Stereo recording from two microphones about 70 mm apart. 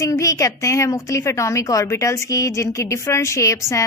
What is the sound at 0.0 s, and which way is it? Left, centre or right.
A woman's voice, left.